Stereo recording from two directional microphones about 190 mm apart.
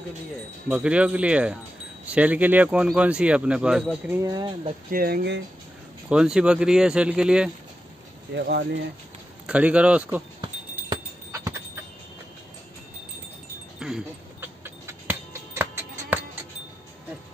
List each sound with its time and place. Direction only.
0.7 s speech: 5° right (ahead or behind)
4.2 s speech: 20° right (ahead or behind)
4.9 s speech: 55° right (ahead or behind)
6.0 s speech: 5° right (ahead or behind)
8.4 s speech: 60° right (ahead or behind)
9.5 s speech: 5° right (ahead or behind)
10.4 s a sound: 20° right (ahead or behind)
13.7 s a sound: 5° right (ahead or behind)